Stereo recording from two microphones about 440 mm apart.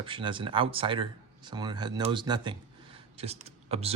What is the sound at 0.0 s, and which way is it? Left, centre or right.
Speech, centre.